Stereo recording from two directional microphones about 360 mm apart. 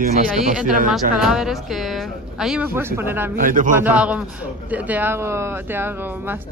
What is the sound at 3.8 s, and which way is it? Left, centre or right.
A man's voice, centre.